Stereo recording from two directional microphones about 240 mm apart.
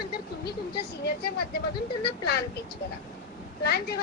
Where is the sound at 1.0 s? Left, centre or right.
Left.